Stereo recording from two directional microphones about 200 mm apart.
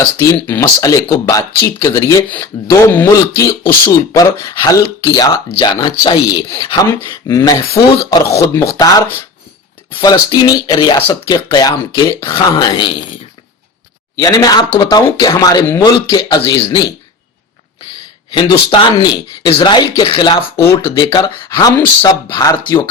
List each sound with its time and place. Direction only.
0.2 s speech: 10° left (ahead or behind)
14.2 s speech: 20° left (ahead or behind)
18.3 s speech: 20° left (ahead or behind)